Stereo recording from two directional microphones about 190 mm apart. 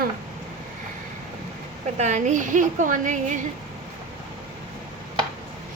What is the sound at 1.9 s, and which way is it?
A woman's voice, 40° right (ahead or behind).